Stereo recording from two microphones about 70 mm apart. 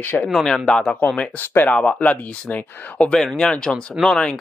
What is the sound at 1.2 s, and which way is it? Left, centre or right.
Speech, left.